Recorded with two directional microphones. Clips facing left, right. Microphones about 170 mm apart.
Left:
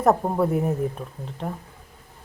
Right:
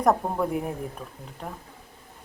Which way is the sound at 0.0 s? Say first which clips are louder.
Left 3 dB; 5° left (ahead or behind).